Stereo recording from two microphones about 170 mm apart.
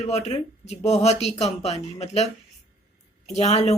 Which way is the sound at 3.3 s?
40° left (ahead or behind).